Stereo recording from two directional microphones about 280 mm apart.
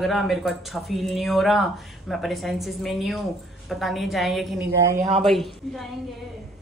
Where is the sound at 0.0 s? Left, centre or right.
Centre.